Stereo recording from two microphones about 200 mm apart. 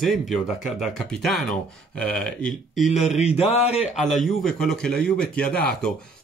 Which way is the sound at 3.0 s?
35° left (ahead or behind).